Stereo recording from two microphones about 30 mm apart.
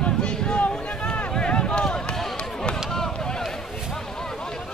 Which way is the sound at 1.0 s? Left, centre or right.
Left.